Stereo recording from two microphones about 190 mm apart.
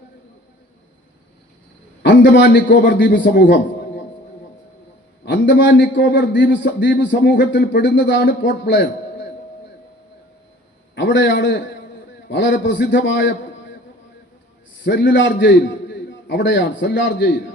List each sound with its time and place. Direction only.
2.0 s a man's voice: 70° left (ahead or behind)
5.2 s a man's voice: 70° left (ahead or behind)
10.9 s a man's voice: 70° left (ahead or behind)
14.8 s a man's voice: 65° left (ahead or behind)